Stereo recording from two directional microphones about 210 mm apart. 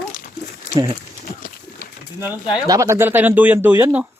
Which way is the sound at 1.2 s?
40° left (ahead or behind).